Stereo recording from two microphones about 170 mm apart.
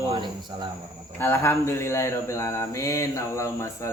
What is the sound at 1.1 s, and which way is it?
Speech, 15° left (ahead or behind).